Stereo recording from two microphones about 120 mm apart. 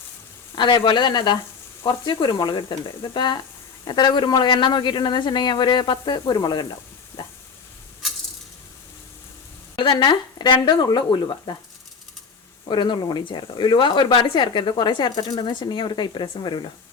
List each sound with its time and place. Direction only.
0.5 s speech: 40° left (ahead or behind)
3.8 s speech: 40° left (ahead or behind)
9.7 s speech: 40° left (ahead or behind)
12.6 s speech: 40° left (ahead or behind)